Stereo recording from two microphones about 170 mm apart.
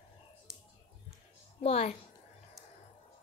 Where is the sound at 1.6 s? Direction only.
40° left (ahead or behind).